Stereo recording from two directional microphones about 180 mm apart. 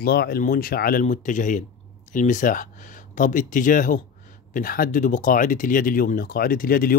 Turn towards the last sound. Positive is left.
turn(degrees=55)  # may be behind; listen again after turning